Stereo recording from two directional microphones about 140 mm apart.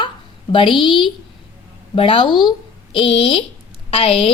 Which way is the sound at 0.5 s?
35° left (ahead or behind).